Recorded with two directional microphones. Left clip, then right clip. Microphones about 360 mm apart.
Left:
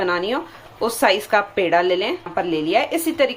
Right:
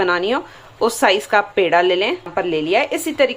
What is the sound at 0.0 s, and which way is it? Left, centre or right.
Speech, centre.